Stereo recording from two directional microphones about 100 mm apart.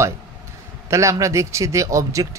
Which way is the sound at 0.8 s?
30° right (ahead or behind).